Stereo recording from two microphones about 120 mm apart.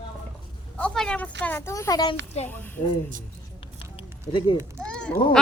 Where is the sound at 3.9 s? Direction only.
45° left (ahead or behind).